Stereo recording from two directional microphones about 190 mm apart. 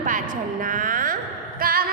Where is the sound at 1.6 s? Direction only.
50° right (ahead or behind).